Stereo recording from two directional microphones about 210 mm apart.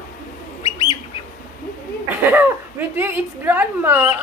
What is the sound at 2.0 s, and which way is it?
A woman's voice, 10° right (ahead or behind).